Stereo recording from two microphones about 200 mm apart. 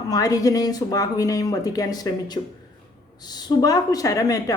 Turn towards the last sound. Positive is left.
turn(degrees=15)  # may be behind; listen again after turning